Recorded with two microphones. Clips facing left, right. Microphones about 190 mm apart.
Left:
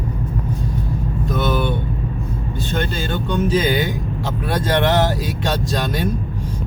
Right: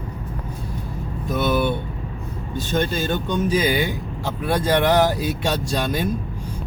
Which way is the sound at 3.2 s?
15° right (ahead or behind).